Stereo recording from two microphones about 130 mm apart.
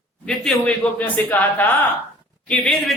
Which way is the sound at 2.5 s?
5° left (ahead or behind).